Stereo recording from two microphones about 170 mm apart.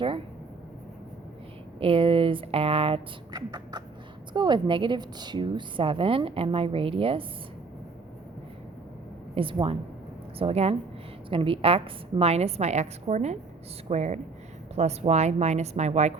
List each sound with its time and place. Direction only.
1.8 s a woman's voice: 30° right (ahead or behind)
9.3 s a woman's voice: 30° right (ahead or behind)